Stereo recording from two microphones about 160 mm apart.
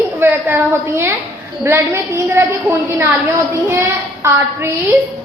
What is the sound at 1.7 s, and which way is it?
A woman's voice, 15° right (ahead or behind).